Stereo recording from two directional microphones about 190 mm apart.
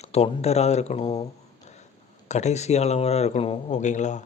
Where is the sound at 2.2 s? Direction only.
35° left (ahead or behind).